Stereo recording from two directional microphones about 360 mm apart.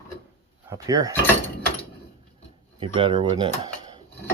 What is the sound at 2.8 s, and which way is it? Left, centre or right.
Speech, centre.